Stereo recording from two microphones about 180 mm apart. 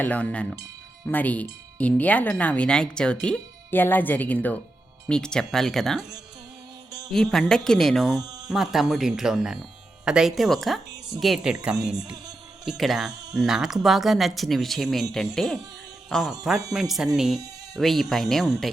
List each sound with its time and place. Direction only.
0.0 s speech: 10° left (ahead or behind)
8.2 s a sound: 20° right (ahead or behind)
8.4 s speech: centre (ahead or behind)
16.0 s speech: centre (ahead or behind)